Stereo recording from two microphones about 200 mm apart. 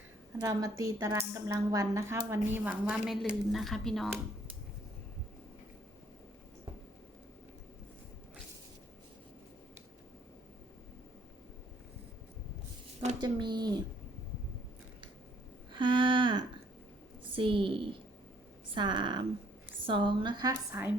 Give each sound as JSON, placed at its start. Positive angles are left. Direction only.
{"t": 0.3, "sound": "speech", "side_deg": -15}
{"t": 13.2, "sound": "a woman's voice", "side_deg": -20}
{"t": 15.7, "sound": "a sound", "side_deg": -25}
{"t": 17.3, "sound": "a woman's voice", "side_deg": -25}